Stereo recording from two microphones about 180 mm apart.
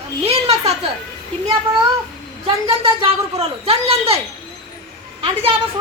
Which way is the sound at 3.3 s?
35° right (ahead or behind).